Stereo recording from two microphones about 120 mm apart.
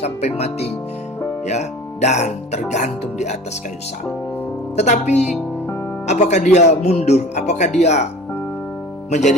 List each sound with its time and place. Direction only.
0.0 s speech: 65° left (ahead or behind)
4.8 s speech: 70° left (ahead or behind)
9.0 s speech: 80° left